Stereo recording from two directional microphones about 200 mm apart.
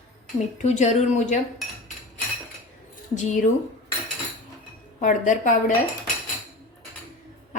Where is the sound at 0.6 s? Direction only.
35° left (ahead or behind).